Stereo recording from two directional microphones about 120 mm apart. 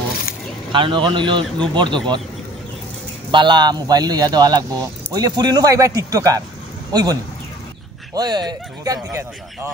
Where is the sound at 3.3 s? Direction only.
40° right (ahead or behind).